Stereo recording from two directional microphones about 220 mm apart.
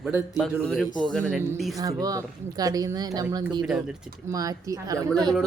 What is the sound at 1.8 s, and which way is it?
Speech, 15° right (ahead or behind).